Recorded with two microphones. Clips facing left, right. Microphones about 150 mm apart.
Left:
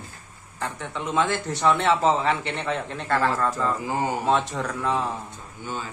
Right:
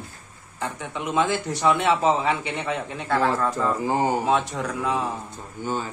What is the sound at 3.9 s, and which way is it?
Speech, 25° right (ahead or behind).